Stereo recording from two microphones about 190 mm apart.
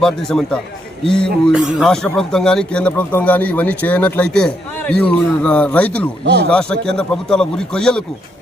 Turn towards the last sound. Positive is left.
turn(degrees=5)  # may be behind; listen again after turning